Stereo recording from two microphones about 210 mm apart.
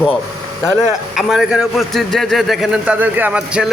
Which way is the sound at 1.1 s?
Centre (ahead or behind).